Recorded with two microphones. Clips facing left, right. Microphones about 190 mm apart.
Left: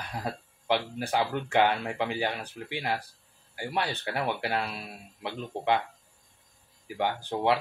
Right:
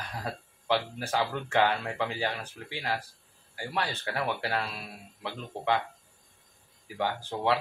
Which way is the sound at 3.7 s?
15° left (ahead or behind).